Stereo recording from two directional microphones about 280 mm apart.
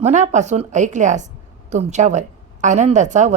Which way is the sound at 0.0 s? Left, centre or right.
Right.